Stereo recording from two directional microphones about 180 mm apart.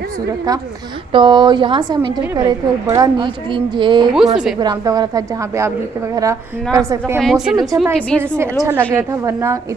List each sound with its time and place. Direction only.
1.1 s a woman's voice: 25° right (ahead or behind)
7.2 s a woman's voice: centre (ahead or behind)
8.6 s a woman's voice: 15° right (ahead or behind)